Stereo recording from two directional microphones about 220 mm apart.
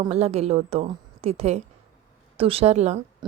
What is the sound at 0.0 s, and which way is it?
A woman's voice, 25° right (ahead or behind).